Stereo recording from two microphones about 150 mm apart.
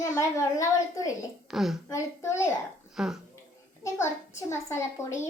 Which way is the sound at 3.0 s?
5° right (ahead or behind).